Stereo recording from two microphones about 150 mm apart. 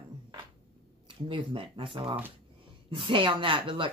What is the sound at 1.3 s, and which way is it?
Speech, 35° right (ahead or behind).